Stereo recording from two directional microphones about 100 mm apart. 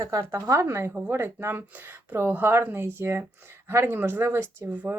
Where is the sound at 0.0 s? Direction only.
30° right (ahead or behind).